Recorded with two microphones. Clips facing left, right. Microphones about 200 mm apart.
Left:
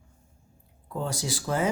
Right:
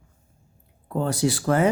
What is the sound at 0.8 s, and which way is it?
Speech, 60° right (ahead or behind).